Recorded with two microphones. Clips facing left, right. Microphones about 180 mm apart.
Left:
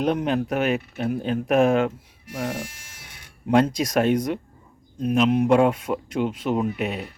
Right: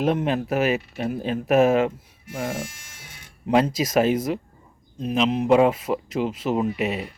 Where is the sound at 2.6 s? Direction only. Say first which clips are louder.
Right 1 dB; 65° left (ahead or behind).